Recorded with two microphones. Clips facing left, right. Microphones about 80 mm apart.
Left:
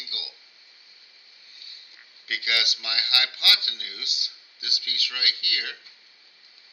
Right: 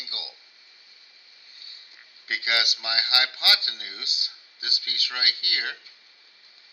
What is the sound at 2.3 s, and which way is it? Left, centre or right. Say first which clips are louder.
Speech: right 2 dB; right.